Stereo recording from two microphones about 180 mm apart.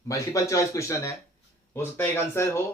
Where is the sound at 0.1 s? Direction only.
20° left (ahead or behind).